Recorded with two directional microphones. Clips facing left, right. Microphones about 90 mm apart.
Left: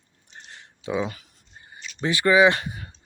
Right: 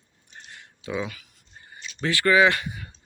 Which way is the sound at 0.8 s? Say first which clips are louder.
Left 3 dB; 20° left (ahead or behind).